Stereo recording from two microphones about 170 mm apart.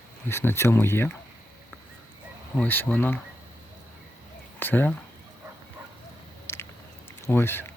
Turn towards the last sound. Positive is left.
turn(degrees=15)  # may be behind; listen again after turning